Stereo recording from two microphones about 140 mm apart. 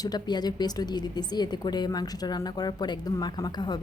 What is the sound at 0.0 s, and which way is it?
A woman's voice, 30° left (ahead or behind).